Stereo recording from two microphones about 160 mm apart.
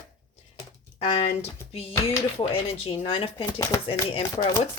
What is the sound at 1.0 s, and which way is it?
Speech, 40° left (ahead or behind).